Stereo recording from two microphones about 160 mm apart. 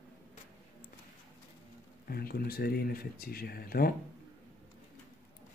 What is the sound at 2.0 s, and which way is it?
Speech, 70° left (ahead or behind).